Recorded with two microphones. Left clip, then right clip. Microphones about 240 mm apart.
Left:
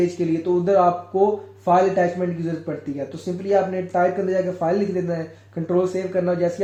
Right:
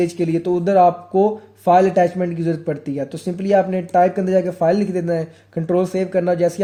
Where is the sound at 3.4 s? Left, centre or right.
Right.